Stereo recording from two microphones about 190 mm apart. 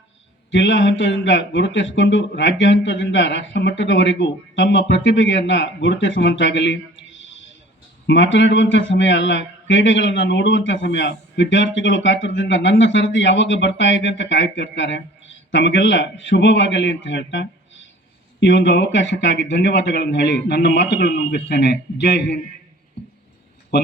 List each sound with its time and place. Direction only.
0.5 s speech: 75° left (ahead or behind)